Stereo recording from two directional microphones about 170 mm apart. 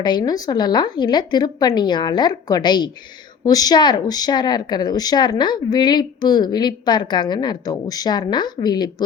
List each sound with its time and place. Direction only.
0.0 s speech: 25° left (ahead or behind)